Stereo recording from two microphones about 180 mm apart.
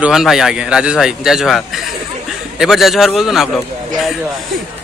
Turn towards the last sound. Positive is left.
turn(degrees=0)  # may be behind; listen again after turning